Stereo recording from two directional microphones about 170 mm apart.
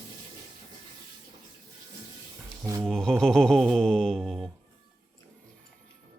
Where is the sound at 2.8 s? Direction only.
5° left (ahead or behind).